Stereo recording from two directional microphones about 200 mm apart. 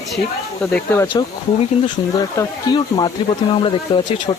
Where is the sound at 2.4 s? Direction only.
20° left (ahead or behind).